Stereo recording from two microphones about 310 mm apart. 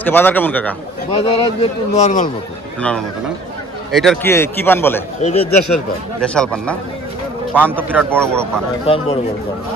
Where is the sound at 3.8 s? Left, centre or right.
Centre.